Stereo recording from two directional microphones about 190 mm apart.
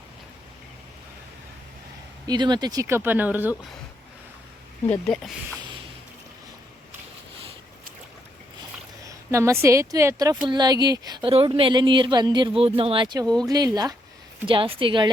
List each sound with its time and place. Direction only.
2.2 s speech: 20° right (ahead or behind)
4.9 s speech: 5° left (ahead or behind)
9.0 s a woman's voice: 15° right (ahead or behind)